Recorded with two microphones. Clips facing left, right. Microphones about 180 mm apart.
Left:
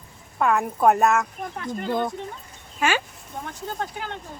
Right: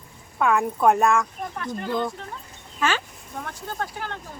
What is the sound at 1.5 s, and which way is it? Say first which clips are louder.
Speech: left 1 dB; 20° left (ahead or behind).